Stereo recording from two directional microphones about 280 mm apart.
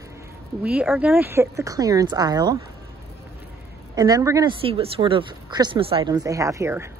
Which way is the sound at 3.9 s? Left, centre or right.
Centre.